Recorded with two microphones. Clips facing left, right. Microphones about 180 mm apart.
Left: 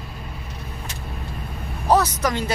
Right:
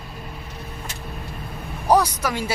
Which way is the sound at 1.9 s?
10° right (ahead or behind).